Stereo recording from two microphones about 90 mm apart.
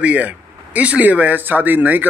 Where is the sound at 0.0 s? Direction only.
15° right (ahead or behind).